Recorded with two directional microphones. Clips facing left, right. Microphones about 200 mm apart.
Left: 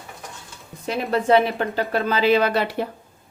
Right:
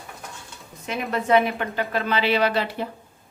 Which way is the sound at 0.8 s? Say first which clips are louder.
Left 4 dB; 35° left (ahead or behind).